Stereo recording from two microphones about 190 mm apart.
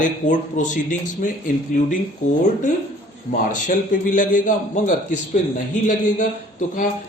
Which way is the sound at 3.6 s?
45° left (ahead or behind).